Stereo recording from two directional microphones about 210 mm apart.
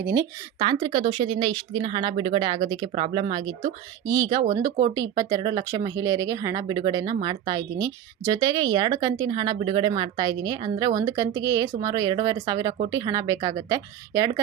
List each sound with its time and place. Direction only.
0.0 s speech: 15° right (ahead or behind)